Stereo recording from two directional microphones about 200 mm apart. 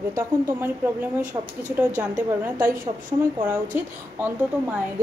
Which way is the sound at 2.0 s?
5° right (ahead or behind).